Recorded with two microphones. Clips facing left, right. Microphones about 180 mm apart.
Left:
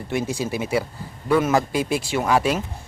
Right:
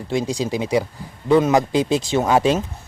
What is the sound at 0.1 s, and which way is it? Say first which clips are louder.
A man's voice: right 3 dB; 15° right (ahead or behind).